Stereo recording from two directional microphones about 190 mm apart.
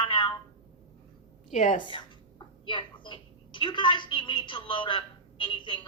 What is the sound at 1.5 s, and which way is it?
Speech, 40° left (ahead or behind).